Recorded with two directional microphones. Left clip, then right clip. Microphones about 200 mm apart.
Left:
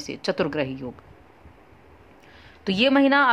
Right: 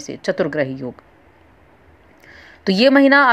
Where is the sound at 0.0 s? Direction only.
5° right (ahead or behind).